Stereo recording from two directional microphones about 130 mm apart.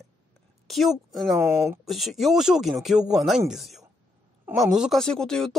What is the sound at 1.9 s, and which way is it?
Speech, centre (ahead or behind).